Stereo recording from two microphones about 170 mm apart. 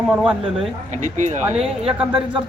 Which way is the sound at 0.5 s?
45° right (ahead or behind).